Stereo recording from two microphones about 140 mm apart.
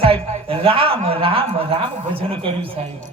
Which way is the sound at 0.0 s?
40° right (ahead or behind).